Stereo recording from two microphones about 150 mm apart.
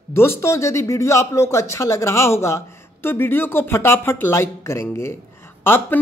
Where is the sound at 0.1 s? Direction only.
15° left (ahead or behind).